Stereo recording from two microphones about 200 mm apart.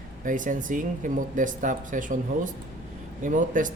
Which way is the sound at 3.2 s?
40° right (ahead or behind).